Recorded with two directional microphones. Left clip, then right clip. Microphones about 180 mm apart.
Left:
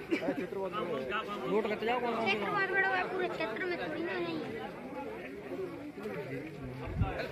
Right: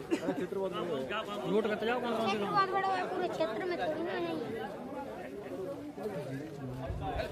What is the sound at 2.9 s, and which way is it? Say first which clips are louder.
Speech: even; 90° right.